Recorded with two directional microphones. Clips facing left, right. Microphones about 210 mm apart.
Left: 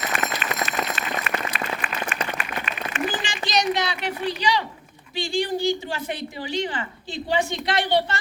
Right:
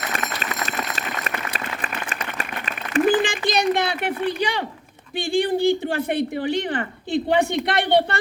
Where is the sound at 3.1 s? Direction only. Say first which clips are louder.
Right 9 dB; 55° right (ahead or behind).